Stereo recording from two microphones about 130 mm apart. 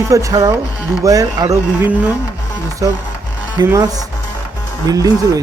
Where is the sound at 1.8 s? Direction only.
10° right (ahead or behind).